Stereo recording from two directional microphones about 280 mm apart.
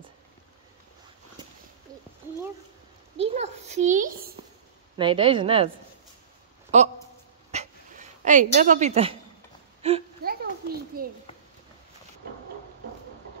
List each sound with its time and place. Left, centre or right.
3.2 s a child's voice: right
4.9 s a woman's voice: centre
6.7 s a man's voice: right
7.5 s dog: right
8.2 s a woman's voice: right
9.8 s a sound: right
10.2 s a sound: right